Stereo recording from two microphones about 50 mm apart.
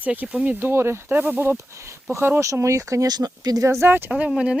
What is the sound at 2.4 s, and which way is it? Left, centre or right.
Speech, right.